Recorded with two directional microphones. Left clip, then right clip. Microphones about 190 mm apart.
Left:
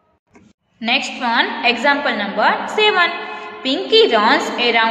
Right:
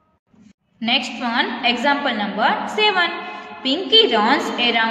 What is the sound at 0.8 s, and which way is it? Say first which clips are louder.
A woman's voice: left 2 dB; 15° right (ahead or behind).